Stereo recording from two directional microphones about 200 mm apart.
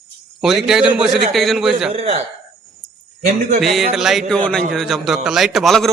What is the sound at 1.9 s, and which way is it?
Speech, 30° right (ahead or behind).